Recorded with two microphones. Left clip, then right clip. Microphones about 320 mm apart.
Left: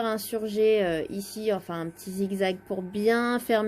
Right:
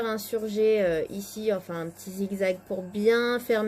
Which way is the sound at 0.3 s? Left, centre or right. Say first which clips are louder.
Even; left.